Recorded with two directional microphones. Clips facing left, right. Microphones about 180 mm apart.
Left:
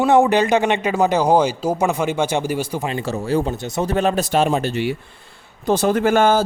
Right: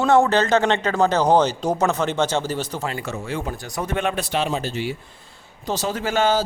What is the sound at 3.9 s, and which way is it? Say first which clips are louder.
Speech: left 5 dB; 40° left (ahead or behind).